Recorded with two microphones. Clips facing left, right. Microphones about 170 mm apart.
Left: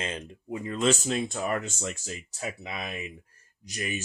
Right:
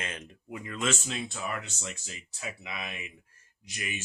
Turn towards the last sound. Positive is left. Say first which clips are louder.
# left 6 dB
turn(degrees=40)  # may be behind; listen again after turning